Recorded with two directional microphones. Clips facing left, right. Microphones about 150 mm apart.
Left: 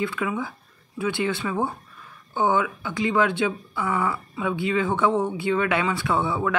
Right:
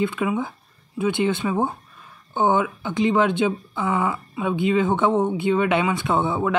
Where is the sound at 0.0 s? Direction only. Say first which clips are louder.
Right 4 dB; 20° right (ahead or behind).